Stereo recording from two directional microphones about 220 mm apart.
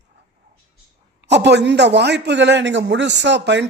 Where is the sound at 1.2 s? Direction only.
50° right (ahead or behind).